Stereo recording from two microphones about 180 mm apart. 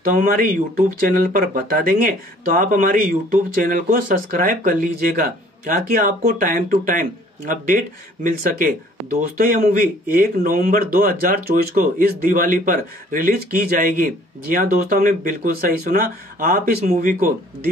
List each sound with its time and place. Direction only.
0.0 s speech: 50° right (ahead or behind)